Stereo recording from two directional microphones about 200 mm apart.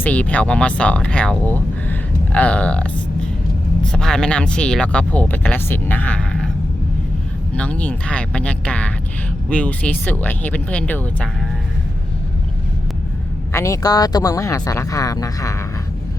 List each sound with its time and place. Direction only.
0.0 s speech: 5° left (ahead or behind)
7.5 s speech: 5° left (ahead or behind)
13.5 s speech: 15° left (ahead or behind)